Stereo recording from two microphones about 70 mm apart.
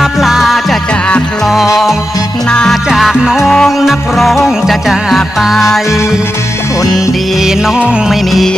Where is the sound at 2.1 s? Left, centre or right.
Left.